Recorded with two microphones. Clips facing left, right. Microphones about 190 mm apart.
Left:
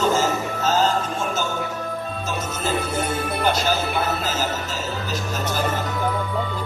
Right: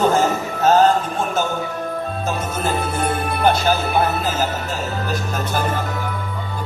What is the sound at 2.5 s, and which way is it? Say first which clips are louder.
Jingle bell: right 2 dB; 55° right (ahead or behind).